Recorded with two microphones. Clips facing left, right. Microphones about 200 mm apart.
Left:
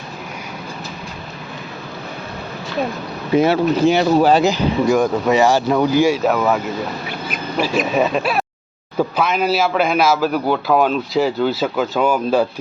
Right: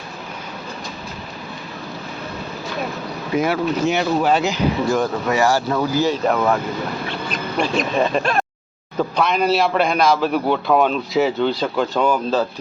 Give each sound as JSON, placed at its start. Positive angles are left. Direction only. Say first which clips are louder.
{"t": 3.3, "sound": "speech", "louder": "left 5 dB", "side_deg": 30}
{"t": 4.9, "sound": "a man's voice", "louder": "left 4 dB", "side_deg": 15}